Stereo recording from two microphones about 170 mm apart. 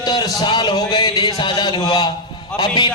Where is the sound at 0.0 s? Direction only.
25° left (ahead or behind).